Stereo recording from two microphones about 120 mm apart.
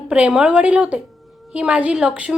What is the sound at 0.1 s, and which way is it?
A woman's voice, 10° right (ahead or behind).